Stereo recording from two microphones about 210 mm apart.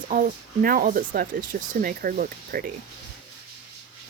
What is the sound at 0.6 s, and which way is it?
Speech, 45° right (ahead or behind).